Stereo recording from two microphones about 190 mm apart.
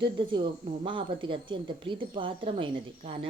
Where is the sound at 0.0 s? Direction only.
25° right (ahead or behind).